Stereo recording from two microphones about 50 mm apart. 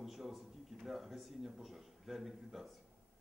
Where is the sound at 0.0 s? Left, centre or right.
Centre.